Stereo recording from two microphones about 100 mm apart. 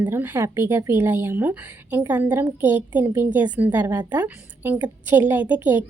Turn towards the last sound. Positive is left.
turn(degrees=-15)  # may be behind; listen again after turning